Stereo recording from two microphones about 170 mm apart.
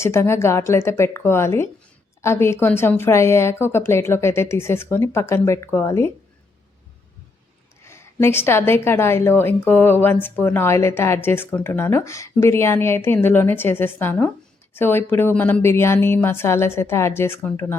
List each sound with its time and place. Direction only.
0.0 s a woman's voice: 15° left (ahead or behind)
7.9 s a woman's voice: 15° left (ahead or behind)